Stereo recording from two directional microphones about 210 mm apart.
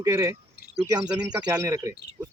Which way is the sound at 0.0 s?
15° right (ahead or behind).